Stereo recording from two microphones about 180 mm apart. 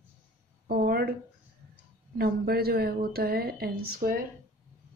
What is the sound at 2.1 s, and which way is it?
A woman's voice, 60° right (ahead or behind).